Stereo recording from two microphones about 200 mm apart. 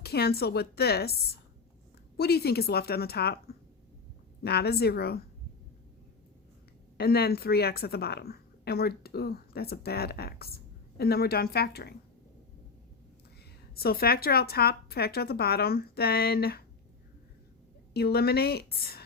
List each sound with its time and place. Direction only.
0.0 s a woman's voice: 50° left (ahead or behind)
6.9 s a woman's voice: 50° left (ahead or behind)
13.7 s a woman's voice: 50° left (ahead or behind)
17.9 s a woman's voice: 50° left (ahead or behind)